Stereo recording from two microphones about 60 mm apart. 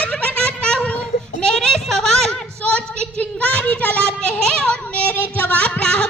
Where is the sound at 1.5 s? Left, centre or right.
Centre.